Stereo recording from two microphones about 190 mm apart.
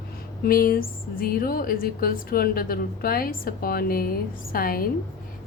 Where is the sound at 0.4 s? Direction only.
50° left (ahead or behind).